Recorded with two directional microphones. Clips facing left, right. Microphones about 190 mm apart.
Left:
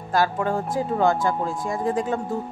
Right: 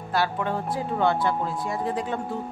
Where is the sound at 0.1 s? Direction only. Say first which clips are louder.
Left 4 dB; 45° left (ahead or behind).